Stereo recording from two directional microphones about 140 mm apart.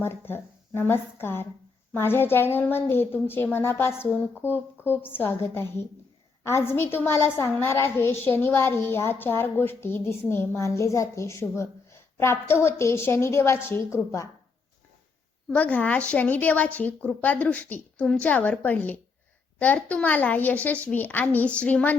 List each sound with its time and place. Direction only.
0.0 s a woman's voice: 15° left (ahead or behind)
15.4 s a woman's voice: 10° left (ahead or behind)